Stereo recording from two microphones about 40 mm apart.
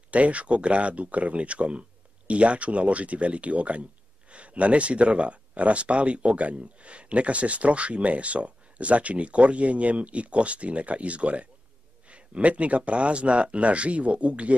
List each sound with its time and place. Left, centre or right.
0.1 s speech: right